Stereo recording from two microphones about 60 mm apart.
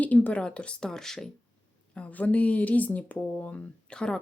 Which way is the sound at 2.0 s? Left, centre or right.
Left.